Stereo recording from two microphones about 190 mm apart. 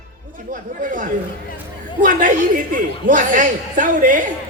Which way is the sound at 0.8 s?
45° right (ahead or behind).